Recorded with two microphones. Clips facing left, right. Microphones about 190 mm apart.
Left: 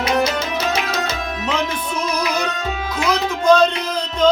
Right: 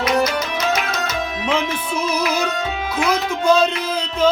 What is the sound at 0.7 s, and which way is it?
Music, 30° left (ahead or behind).